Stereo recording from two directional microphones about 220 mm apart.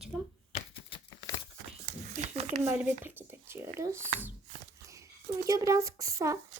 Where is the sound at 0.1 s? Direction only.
Centre (ahead or behind).